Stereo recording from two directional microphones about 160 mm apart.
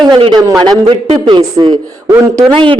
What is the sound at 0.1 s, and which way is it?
A woman's voice, 30° right (ahead or behind).